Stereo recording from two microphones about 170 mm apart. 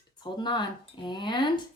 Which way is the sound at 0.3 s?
30° left (ahead or behind).